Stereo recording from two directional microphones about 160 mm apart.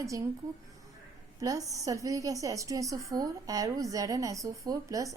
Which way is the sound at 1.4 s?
20° right (ahead or behind).